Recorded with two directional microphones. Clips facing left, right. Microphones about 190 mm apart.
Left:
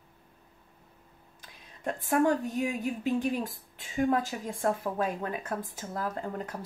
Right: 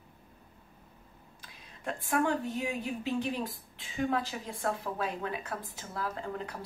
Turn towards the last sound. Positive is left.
turn(degrees=45)  # may be behind; listen again after turning